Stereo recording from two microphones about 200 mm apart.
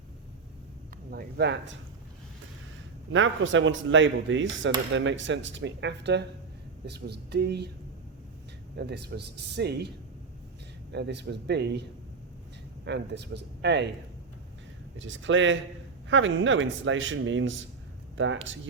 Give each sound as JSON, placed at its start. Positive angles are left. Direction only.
{"t": 1.1, "sound": "speech", "side_deg": -55}
{"t": 3.1, "sound": "speech", "side_deg": -70}
{"t": 8.7, "sound": "speech", "side_deg": -55}
{"t": 10.9, "sound": "speech", "side_deg": -60}
{"t": 14.9, "sound": "speech", "side_deg": -70}